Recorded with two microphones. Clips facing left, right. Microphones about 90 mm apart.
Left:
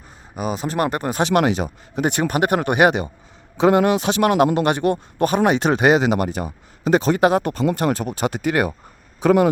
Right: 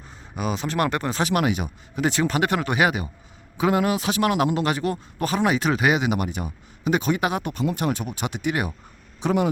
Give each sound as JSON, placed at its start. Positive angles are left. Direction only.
{"t": 0.3, "sound": "speech", "side_deg": 40}
{"t": 2.0, "sound": "a man's voice", "side_deg": 55}
{"t": 5.9, "sound": "speech", "side_deg": 40}